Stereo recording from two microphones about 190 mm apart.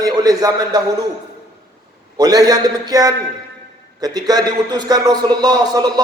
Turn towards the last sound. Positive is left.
turn(degrees=-20)  # may be behind; listen again after turning